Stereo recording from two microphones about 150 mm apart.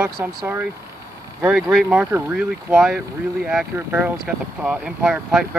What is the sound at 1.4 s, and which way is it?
Speech, 5° right (ahead or behind).